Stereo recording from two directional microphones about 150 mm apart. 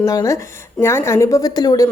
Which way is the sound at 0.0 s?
20° left (ahead or behind).